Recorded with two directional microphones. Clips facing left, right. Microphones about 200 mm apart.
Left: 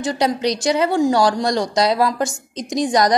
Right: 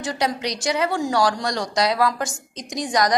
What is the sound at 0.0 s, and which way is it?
A woman's voice, 30° left (ahead or behind).